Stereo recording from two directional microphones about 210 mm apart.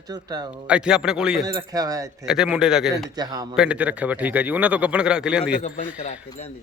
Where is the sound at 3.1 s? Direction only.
20° right (ahead or behind).